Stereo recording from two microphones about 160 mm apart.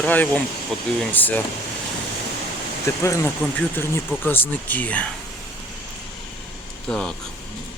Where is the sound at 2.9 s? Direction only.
15° left (ahead or behind).